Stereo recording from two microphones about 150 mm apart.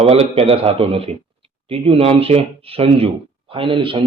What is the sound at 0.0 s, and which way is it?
Speech, 40° right (ahead or behind).